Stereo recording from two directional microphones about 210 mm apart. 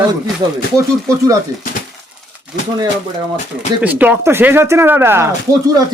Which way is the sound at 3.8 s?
10° right (ahead or behind).